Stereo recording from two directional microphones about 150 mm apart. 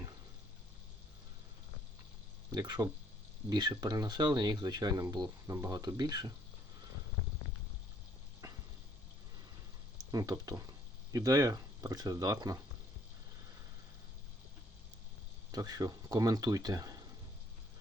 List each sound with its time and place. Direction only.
2.5 s speech: 30° right (ahead or behind)
10.0 s speech: 25° right (ahead or behind)
15.5 s speech: 25° right (ahead or behind)